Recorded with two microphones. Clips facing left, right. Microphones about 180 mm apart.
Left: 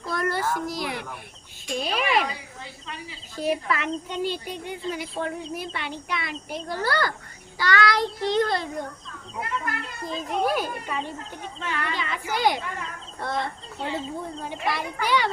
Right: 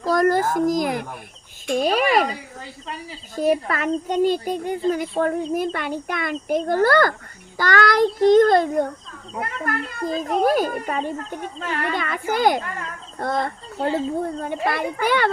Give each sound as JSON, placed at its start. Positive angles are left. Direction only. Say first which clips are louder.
{"t": 0.1, "sound": "a child's voice", "louder": "right 8 dB", "side_deg": -40}